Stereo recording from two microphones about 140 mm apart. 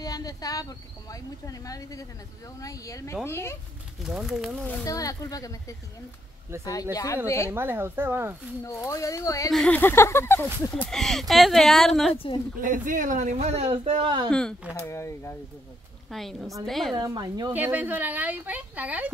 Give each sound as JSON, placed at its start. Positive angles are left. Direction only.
{"t": 0.0, "sound": "speech", "side_deg": 25}
{"t": 4.0, "sound": "speech", "side_deg": -5}
{"t": 4.8, "sound": "speech", "side_deg": 25}
{"t": 7.5, "sound": "speech", "side_deg": -15}
{"t": 8.6, "sound": "speech", "side_deg": 20}
{"t": 9.5, "sound": "speech", "side_deg": 0}
{"t": 9.8, "sound": "speech", "side_deg": 15}
{"t": 10.9, "sound": "speech", "side_deg": 5}
{"t": 12.5, "sound": "a man's voice", "side_deg": -70}
{"t": 14.9, "sound": "speech", "side_deg": 20}
{"t": 16.1, "sound": "speech", "side_deg": 0}
{"t": 16.9, "sound": "a woman's voice", "side_deg": -30}
{"t": 17.5, "sound": "speech", "side_deg": -15}